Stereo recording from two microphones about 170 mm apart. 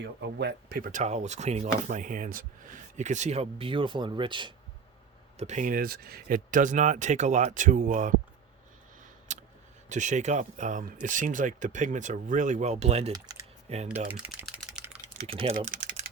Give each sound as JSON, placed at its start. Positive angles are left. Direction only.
{"t": 0.0, "sound": "speech", "side_deg": -85}
{"t": 5.4, "sound": "speech", "side_deg": -45}
{"t": 9.3, "sound": "a sound", "side_deg": -45}
{"t": 9.9, "sound": "speech", "side_deg": -45}
{"t": 14.1, "sound": "typing", "side_deg": -5}
{"t": 15.3, "sound": "speech", "side_deg": -35}